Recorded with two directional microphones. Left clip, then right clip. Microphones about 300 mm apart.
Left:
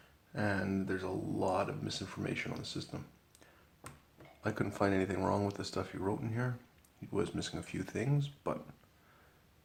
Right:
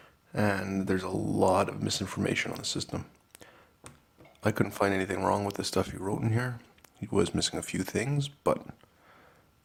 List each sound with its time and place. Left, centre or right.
0.3 s speech: right
3.8 s a sound: centre
4.4 s speech: right